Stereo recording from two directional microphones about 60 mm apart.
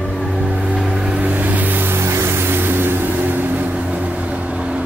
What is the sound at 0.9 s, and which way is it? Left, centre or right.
Vehicle, centre.